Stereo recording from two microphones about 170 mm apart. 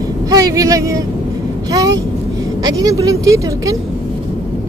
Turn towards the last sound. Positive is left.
turn(degrees=-20)  # may be behind; listen again after turning